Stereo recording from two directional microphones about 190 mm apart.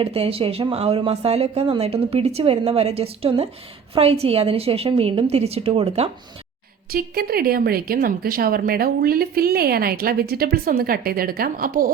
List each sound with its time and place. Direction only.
0.0 s speech: 30° right (ahead or behind)
6.9 s speech: 50° right (ahead or behind)